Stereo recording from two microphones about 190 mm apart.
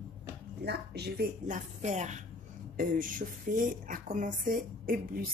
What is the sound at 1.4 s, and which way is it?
A woman's voice, 40° right (ahead or behind).